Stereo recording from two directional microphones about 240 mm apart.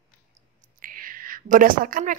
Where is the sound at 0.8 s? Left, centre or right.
Right.